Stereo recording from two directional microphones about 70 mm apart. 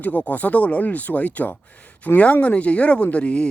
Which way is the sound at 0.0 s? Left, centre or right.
Left.